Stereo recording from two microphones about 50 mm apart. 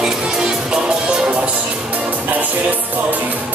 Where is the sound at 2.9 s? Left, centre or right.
Right.